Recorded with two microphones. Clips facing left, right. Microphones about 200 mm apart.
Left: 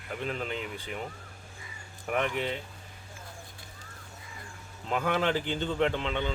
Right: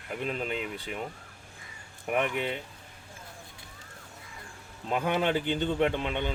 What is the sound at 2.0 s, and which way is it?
Speech, 15° right (ahead or behind).